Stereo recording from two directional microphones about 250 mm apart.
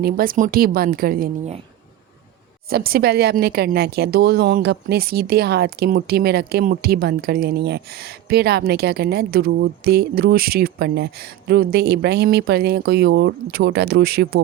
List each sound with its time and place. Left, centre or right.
0.0 s speech: right
2.6 s speech: right